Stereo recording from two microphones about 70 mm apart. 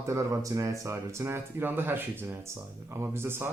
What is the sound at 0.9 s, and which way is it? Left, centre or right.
Speech, right.